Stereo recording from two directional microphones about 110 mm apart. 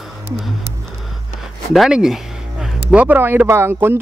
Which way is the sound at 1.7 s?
5° right (ahead or behind).